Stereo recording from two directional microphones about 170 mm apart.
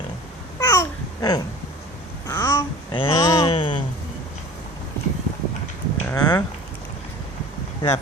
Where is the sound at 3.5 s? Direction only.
30° left (ahead or behind).